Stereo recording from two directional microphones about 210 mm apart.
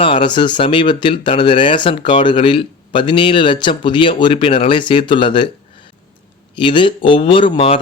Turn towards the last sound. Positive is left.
turn(degrees=25)  # may be behind; listen again after turning